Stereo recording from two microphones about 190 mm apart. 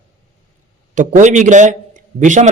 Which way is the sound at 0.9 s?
40° right (ahead or behind).